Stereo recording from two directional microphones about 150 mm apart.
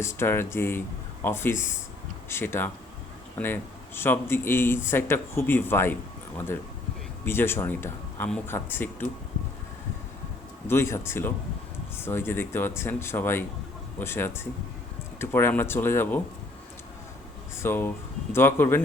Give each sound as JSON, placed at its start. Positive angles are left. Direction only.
{"t": 0.0, "sound": "speech", "side_deg": 15}
{"t": 10.7, "sound": "speech", "side_deg": 15}
{"t": 17.6, "sound": "speech", "side_deg": 15}